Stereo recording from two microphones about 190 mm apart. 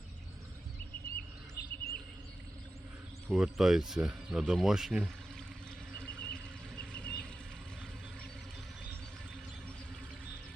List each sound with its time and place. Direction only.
1.1 s chirp: 55° left (ahead or behind)
3.2 s speech: 5° right (ahead or behind)
6.0 s a sound: 5° left (ahead or behind)